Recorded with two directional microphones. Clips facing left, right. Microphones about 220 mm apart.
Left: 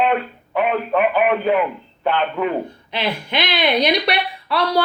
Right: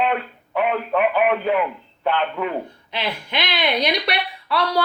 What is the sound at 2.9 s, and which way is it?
Speech, 25° left (ahead or behind).